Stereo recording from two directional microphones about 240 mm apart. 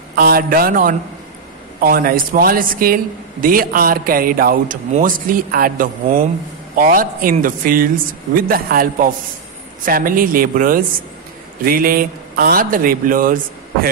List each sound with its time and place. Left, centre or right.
0.1 s speech: right